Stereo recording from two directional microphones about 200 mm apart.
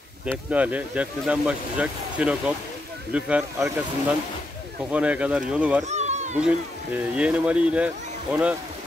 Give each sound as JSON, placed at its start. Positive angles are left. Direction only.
{"t": 0.5, "sound": "speech", "side_deg": -5}
{"t": 4.9, "sound": "speech", "side_deg": -5}
{"t": 5.9, "sound": "a sound", "side_deg": -35}
{"t": 6.3, "sound": "speech", "side_deg": -5}